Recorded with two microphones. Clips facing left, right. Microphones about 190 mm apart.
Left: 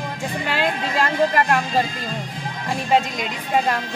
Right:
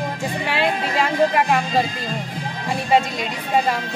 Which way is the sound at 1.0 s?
10° right (ahead or behind).